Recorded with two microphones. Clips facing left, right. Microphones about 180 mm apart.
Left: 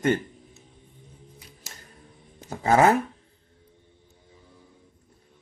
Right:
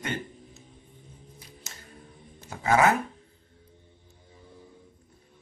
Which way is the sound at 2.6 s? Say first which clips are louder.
Left 3 dB; 35° left (ahead or behind).